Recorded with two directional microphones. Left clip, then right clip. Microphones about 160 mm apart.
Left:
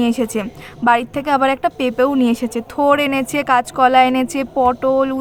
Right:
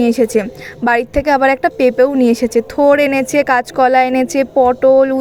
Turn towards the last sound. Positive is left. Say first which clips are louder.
# right 5 dB
turn(degrees=-10)  # may be behind; listen again after turning